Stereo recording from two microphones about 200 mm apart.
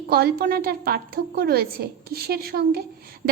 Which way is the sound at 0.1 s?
50° right (ahead or behind).